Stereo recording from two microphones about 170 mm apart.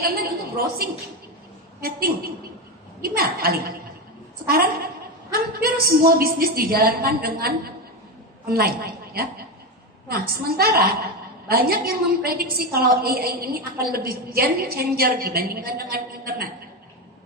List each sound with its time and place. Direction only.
0.0 s a woman's voice: 65° right (ahead or behind)
1.8 s a woman's voice: 60° right (ahead or behind)